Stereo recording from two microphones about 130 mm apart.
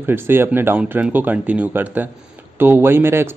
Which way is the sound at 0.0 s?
15° right (ahead or behind).